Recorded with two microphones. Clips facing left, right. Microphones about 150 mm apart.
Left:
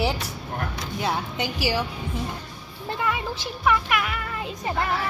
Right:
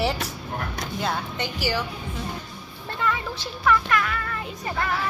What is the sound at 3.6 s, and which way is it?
Fowl, 15° left (ahead or behind).